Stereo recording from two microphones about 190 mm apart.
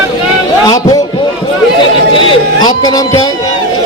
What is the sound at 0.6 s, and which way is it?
Speech, 20° left (ahead or behind).